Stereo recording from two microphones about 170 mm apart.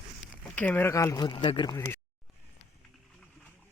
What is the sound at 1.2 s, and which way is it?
Speech, 30° left (ahead or behind).